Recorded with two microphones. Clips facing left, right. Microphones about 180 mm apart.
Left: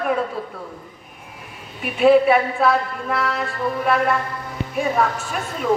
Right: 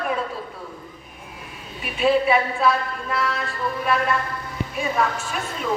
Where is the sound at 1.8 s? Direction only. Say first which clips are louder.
Left 6 dB; 55° left (ahead or behind).